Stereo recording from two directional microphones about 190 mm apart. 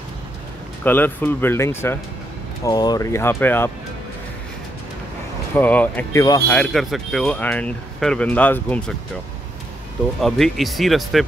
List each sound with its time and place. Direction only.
0.8 s speech: 10° left (ahead or behind)
5.5 s speech: 10° left (ahead or behind)
10.2 s speech: centre (ahead or behind)